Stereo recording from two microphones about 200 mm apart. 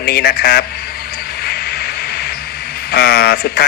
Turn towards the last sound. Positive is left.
turn(degrees=50)  # may be behind; listen again after turning